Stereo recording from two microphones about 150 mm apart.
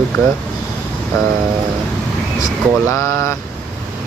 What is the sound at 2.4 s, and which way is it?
Speech, 20° left (ahead or behind).